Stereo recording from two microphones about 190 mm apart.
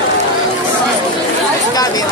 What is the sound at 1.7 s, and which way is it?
Speech, 20° left (ahead or behind).